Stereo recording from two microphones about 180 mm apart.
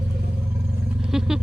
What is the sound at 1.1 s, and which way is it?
Vehicle, centre (ahead or behind).